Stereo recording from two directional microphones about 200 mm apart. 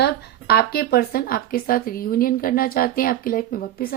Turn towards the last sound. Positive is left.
turn(degrees=50)  # may be behind; listen again after turning